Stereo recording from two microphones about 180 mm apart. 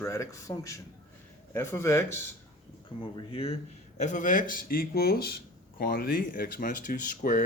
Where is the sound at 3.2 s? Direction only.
30° left (ahead or behind).